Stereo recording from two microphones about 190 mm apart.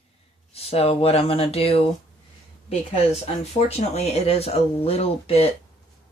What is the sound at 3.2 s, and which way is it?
Speech, 35° left (ahead or behind).